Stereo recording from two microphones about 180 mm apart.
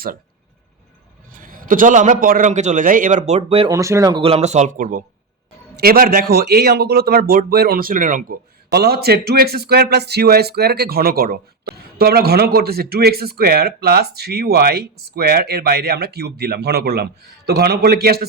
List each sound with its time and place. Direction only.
1.3 s a man's voice: 50° right (ahead or behind); by 3.7 s 35° right (ahead or behind)
3.7 s speech: 15° right (ahead or behind)
4.2 s a man's voice: 35° right (ahead or behind); by 18.3 s 60° right (ahead or behind)